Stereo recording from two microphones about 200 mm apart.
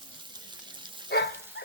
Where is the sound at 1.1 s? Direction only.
55° left (ahead or behind).